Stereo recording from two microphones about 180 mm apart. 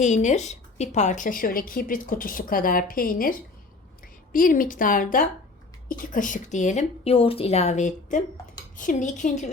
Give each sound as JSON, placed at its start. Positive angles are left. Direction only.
{"t": 0.0, "sound": "a woman's voice", "side_deg": 40}